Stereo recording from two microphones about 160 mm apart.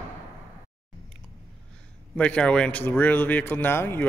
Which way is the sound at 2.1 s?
5° left (ahead or behind).